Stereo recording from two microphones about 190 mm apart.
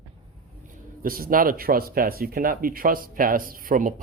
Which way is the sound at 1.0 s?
50° right (ahead or behind).